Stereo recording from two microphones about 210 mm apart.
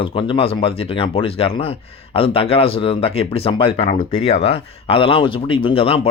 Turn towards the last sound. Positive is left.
turn(degrees=25)  # may be behind; listen again after turning